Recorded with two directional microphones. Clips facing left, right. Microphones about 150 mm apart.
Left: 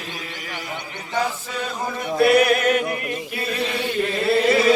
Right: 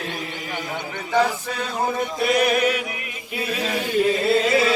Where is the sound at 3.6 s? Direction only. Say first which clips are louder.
Left 1 dB; 45° right (ahead or behind).